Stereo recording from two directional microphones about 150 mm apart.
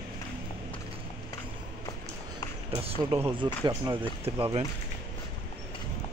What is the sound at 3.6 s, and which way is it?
Speech, 30° right (ahead or behind).